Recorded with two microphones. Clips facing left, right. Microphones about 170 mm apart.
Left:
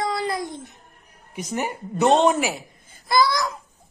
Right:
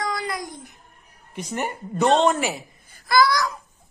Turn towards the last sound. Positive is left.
turn(degrees=25)  # may be behind; listen again after turning